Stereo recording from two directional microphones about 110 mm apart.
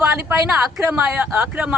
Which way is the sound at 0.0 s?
10° right (ahead or behind).